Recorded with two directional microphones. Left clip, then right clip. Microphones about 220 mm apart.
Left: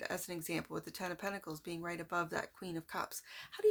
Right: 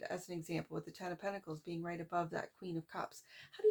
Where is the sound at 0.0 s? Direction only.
35° left (ahead or behind).